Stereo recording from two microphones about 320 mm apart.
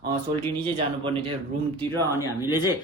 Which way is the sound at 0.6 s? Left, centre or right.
Centre.